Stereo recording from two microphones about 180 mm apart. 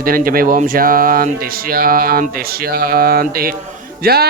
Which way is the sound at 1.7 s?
55° right (ahead or behind).